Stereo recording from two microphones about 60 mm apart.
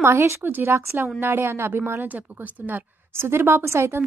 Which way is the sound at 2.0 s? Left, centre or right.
Right.